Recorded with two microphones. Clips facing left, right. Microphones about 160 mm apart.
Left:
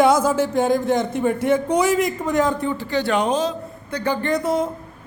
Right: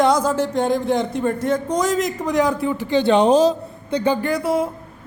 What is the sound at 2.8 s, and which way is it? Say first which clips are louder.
Speech: right 7 dB; 20° right (ahead or behind).